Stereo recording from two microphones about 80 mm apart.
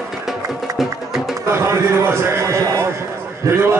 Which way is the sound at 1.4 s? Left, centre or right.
Right.